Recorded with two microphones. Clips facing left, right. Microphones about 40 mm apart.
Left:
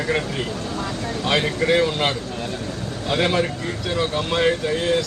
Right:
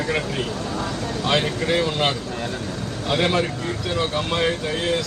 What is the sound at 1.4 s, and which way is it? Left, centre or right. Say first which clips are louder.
Speech: left 3 dB; left.